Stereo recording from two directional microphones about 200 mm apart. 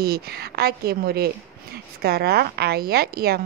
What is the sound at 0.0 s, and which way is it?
A woman's voice, 50° right (ahead or behind).